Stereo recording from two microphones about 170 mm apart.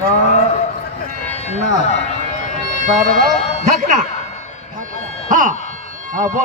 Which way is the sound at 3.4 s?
40° left (ahead or behind).